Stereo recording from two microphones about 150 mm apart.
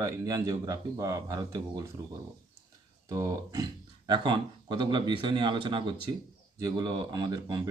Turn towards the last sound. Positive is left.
turn(degrees=-25)  # may be behind; listen again after turning